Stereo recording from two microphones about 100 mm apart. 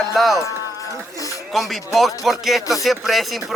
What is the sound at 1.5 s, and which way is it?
Speech, centre (ahead or behind).